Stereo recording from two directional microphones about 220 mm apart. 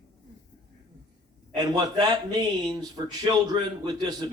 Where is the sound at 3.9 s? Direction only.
20° right (ahead or behind).